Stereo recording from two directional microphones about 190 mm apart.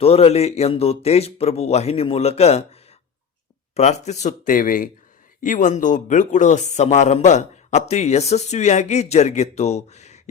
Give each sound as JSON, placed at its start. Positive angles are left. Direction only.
{"t": 0.0, "sound": "speech", "side_deg": 30}
{"t": 3.8, "sound": "speech", "side_deg": 35}